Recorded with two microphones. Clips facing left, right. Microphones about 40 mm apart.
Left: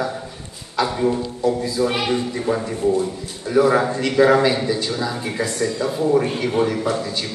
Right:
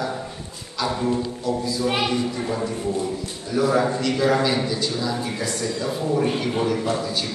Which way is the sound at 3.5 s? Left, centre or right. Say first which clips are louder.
Left 4 dB; left.